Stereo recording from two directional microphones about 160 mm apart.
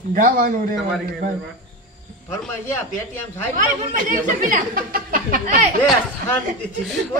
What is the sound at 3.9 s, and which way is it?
Speech, 55° right (ahead or behind).